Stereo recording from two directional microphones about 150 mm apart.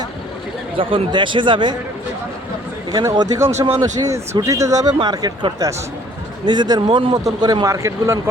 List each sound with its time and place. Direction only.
0.8 s speech: 35° right (ahead or behind)
2.9 s speech: 25° right (ahead or behind)